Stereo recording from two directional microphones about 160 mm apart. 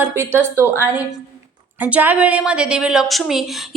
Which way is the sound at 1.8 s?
10° right (ahead or behind).